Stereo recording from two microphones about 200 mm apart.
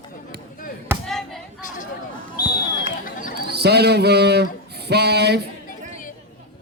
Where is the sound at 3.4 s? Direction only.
55° right (ahead or behind).